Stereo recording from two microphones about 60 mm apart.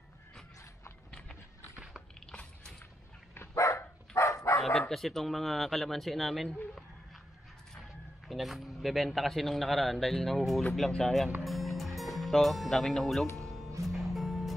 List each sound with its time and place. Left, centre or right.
3.5 s dog: left
4.6 s a man's voice: centre
8.3 s a man's voice: centre
11.4 s music: centre